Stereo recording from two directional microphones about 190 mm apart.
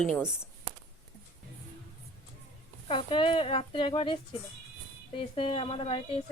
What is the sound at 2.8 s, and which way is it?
Speech, 25° left (ahead or behind).